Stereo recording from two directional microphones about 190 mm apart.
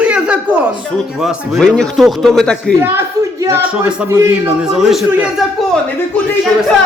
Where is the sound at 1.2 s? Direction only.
Centre (ahead or behind).